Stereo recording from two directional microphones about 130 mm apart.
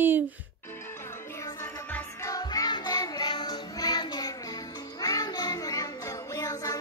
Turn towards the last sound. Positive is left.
turn(degrees=25)  # may be behind; listen again after turning